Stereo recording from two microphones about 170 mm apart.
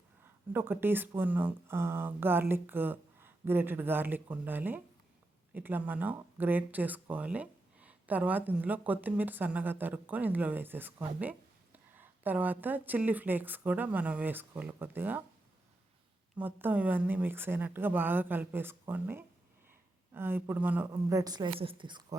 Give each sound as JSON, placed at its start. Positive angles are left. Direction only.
{"t": 0.5, "sound": "a woman's voice", "side_deg": -15}
{"t": 16.4, "sound": "speech", "side_deg": -10}